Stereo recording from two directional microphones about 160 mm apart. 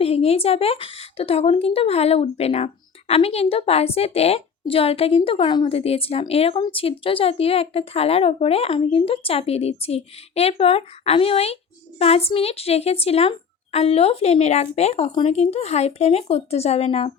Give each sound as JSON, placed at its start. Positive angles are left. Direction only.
{"t": 0.0, "sound": "a woman's voice", "side_deg": 40}